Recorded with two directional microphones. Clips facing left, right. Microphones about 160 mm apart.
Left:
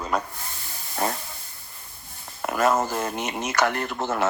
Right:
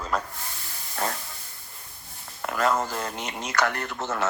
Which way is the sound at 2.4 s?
25° left (ahead or behind).